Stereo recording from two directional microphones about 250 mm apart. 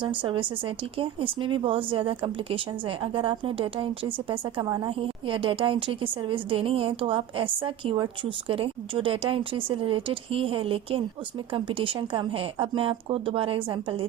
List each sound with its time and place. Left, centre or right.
0.0 s speech: centre